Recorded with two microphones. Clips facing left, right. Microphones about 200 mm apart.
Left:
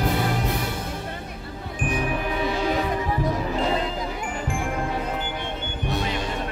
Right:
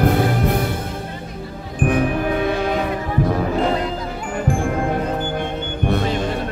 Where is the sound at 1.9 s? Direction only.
55° right (ahead or behind).